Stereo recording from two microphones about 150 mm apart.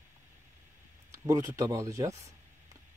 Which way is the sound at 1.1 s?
20° right (ahead or behind).